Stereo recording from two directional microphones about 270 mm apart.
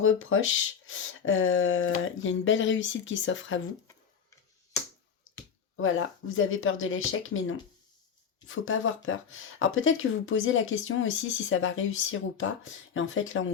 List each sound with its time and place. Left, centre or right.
0.0 s speech: left
5.7 s speech: left